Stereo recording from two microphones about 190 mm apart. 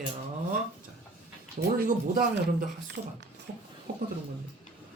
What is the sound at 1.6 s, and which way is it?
Speech, 45° right (ahead or behind).